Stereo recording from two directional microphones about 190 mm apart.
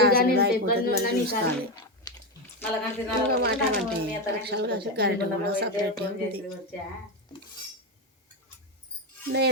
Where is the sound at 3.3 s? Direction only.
60° right (ahead or behind).